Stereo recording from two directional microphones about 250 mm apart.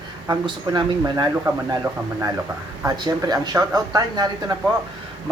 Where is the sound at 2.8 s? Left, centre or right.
Centre.